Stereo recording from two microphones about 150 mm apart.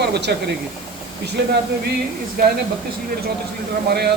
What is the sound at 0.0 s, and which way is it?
Speech, 90° right.